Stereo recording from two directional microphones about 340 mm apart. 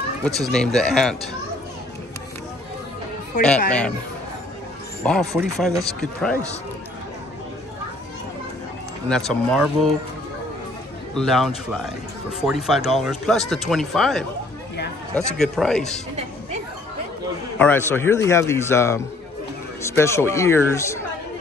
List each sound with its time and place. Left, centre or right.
0.2 s speech: centre
3.4 s speech: centre
5.0 s speech: centre
9.1 s speech: centre
11.1 s speech: centre
17.6 s speech: centre